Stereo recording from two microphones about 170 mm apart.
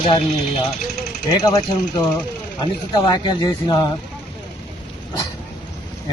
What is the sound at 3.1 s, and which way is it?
Speech, 25° left (ahead or behind).